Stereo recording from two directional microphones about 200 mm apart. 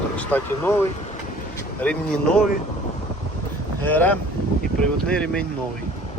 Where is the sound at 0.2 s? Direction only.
10° left (ahead or behind).